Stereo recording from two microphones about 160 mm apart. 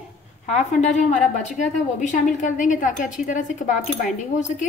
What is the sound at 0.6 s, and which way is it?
Speech, 45° left (ahead or behind).